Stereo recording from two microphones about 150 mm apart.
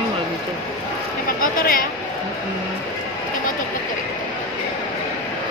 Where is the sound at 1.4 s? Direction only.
75° left (ahead or behind).